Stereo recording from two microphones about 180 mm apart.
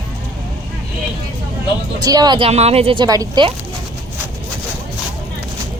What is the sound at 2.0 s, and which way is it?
Speech, 20° right (ahead or behind).